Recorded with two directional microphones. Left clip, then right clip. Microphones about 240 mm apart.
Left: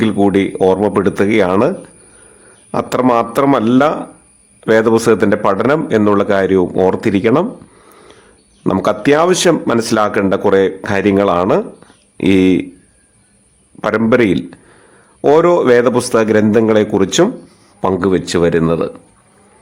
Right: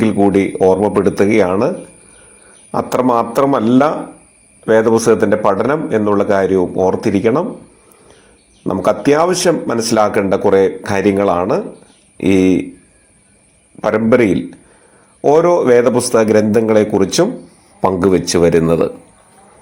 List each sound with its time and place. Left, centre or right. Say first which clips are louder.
0.0 s a man's voice: even; centre
2.7 s a man's voice: left 1 dB; centre
8.6 s a man's voice: even; centre
13.8 s a man's voice: even; centre